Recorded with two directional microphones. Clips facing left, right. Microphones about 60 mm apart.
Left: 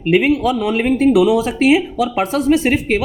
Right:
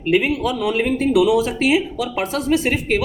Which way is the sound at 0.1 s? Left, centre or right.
Left.